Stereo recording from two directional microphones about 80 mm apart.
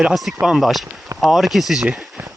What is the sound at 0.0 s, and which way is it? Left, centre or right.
Speech, centre.